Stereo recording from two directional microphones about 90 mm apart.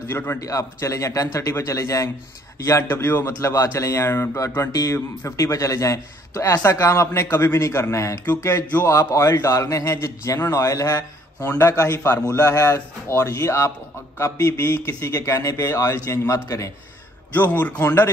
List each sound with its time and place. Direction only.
0.1 s speech: 25° left (ahead or behind)
0.4 s speech: 40° left (ahead or behind)
17.3 s speech: 20° left (ahead or behind)